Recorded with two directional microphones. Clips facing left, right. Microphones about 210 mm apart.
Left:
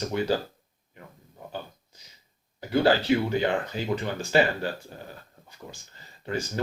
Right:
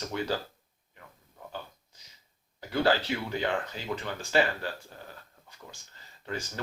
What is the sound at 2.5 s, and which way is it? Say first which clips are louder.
Speech: left 4 dB; 10° left (ahead or behind).